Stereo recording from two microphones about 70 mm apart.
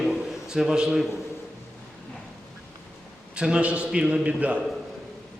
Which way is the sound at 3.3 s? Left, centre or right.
Centre.